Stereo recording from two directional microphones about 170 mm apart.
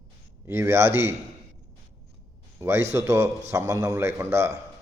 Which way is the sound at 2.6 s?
15° right (ahead or behind).